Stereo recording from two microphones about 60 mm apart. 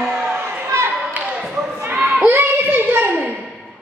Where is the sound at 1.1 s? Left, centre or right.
Right.